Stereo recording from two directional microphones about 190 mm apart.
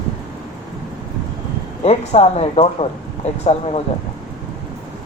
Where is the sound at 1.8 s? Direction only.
35° left (ahead or behind).